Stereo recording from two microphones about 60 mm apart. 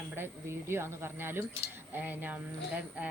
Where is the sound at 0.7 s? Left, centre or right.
Right.